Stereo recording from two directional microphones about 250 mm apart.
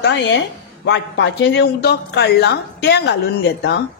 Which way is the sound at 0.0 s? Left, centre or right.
Left.